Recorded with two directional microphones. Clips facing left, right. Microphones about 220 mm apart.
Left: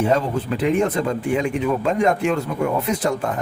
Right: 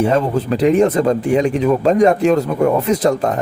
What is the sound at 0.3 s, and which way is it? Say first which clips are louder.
Speech: right 6 dB; 40° right (ahead or behind).